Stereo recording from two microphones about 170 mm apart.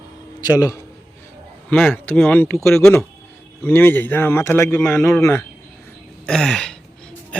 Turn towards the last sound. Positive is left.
turn(degrees=5)  # may be behind; listen again after turning